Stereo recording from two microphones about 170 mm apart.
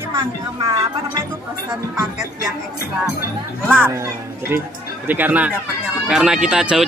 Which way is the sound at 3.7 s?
15° right (ahead or behind).